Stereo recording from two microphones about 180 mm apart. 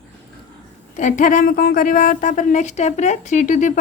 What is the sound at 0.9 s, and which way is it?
A woman's voice, 45° left (ahead or behind).